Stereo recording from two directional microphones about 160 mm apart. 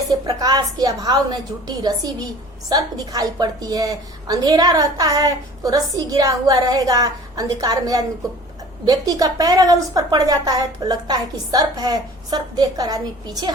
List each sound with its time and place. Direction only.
0.1 s a woman's voice: 25° right (ahead or behind)